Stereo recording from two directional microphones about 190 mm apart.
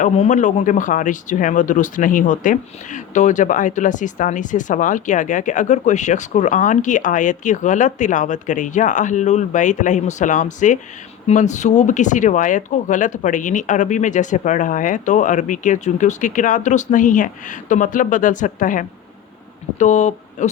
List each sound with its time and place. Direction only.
0.0 s speech: 40° left (ahead or behind)